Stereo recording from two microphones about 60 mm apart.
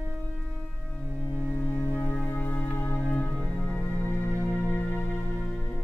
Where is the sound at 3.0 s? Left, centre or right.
Centre.